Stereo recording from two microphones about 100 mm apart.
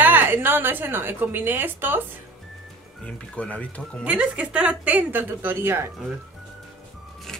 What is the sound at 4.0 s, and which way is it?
Speech, 10° right (ahead or behind).